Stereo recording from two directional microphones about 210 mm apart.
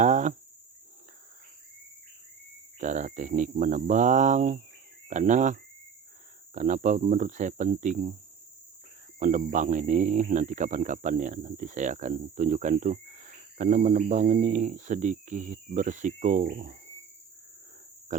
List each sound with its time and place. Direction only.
0.0 s cricket: 35° right (ahead or behind)
2.7 s speech: 35° right (ahead or behind)
9.1 s speech: 35° right (ahead or behind)